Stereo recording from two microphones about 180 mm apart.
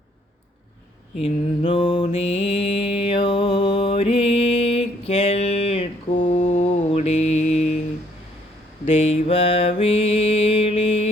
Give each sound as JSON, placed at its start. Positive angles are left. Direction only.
{"t": 1.2, "sound": "mantra", "side_deg": 30}
{"t": 8.9, "sound": "mantra", "side_deg": 35}